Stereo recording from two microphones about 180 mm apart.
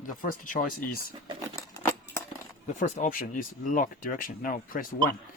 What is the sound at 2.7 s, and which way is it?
Speech, 45° left (ahead or behind).